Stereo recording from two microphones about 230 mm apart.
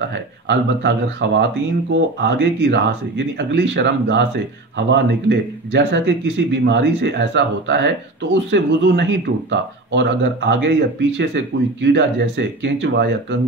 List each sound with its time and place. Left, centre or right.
0.5 s speech: right